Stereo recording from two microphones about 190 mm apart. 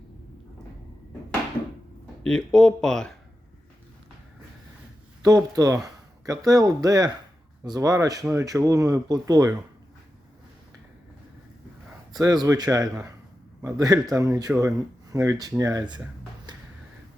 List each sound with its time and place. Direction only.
2.2 s speech: 5° left (ahead or behind)
5.2 s speech: 20° right (ahead or behind)
12.1 s speech: 20° right (ahead or behind)
16.5 s a sound: 20° right (ahead or behind)